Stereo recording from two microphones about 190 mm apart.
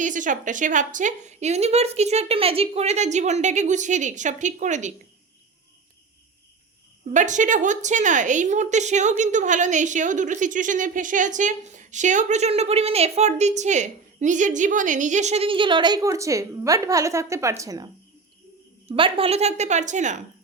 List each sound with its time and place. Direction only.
0.0 s a woman's voice: 40° right (ahead or behind)
7.1 s a woman's voice: 40° right (ahead or behind); by 17.8 s 15° right (ahead or behind)
18.9 s a woman's voice: 30° right (ahead or behind)